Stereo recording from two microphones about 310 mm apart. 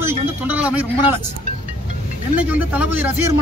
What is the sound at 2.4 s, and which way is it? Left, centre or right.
Speech, centre.